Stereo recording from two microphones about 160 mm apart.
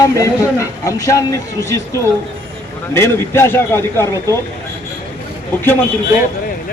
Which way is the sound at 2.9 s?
15° left (ahead or behind).